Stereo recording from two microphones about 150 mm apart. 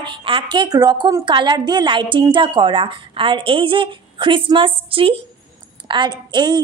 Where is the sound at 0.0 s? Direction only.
35° right (ahead or behind).